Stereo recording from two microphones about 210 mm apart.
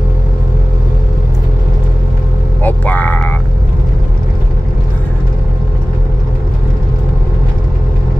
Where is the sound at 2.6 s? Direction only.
10° left (ahead or behind).